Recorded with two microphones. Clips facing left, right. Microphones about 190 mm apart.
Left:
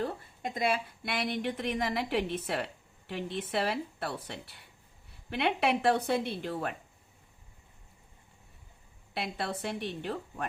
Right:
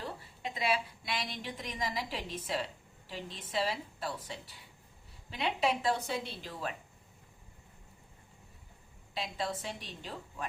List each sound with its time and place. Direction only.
0.0 s a woman's voice: 50° left (ahead or behind)
9.1 s a woman's voice: 60° left (ahead or behind)